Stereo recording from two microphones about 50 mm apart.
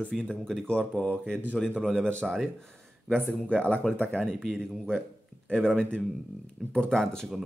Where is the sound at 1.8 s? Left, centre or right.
Centre.